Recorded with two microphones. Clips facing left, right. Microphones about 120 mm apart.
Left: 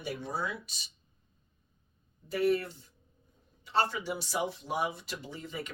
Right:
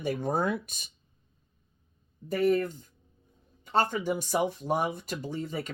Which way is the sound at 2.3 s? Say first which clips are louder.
Right 3 dB; 45° right (ahead or behind).